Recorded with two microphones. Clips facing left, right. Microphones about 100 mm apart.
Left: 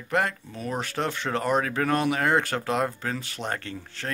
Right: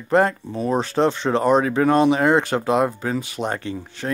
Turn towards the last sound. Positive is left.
turn(degrees=-15)  # may be behind; listen again after turning